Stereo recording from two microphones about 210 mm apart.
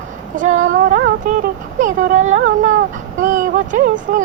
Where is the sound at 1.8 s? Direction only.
35° right (ahead or behind).